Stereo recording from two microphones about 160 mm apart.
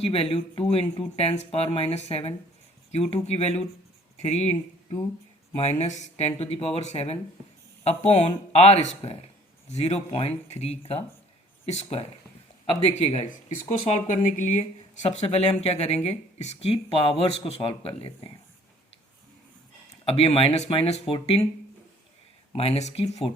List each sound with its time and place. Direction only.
0.0 s speech: 35° left (ahead or behind)
20.1 s speech: 40° left (ahead or behind)
22.5 s speech: 40° left (ahead or behind)